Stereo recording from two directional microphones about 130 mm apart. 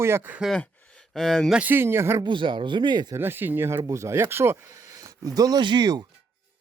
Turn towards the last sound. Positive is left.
turn(degrees=-35)  # may be behind; listen again after turning